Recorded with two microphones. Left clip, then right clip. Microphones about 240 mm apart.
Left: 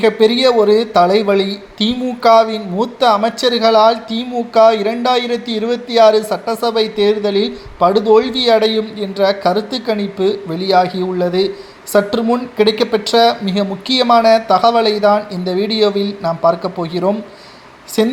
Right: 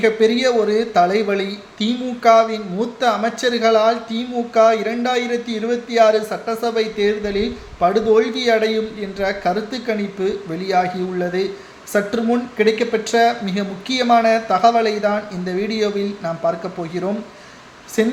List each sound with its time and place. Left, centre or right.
0.0 s a man's voice: left